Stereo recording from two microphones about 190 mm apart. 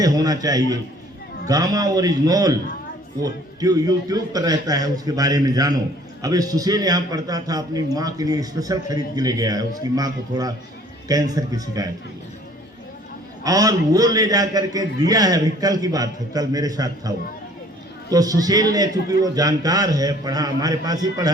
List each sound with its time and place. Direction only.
0.0 s a man's voice: 20° right (ahead or behind)
13.4 s a man's voice: 20° right (ahead or behind)